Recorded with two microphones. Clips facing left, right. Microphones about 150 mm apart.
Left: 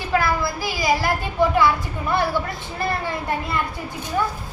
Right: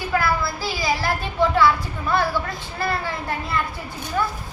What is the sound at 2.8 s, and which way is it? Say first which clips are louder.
Speech: even; 20° left (ahead or behind).